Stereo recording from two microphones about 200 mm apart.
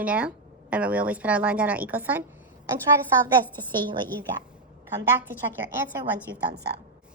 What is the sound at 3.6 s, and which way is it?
Speech, 25° right (ahead or behind).